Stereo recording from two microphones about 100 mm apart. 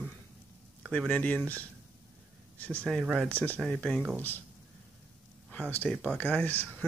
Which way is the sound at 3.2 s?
15° left (ahead or behind).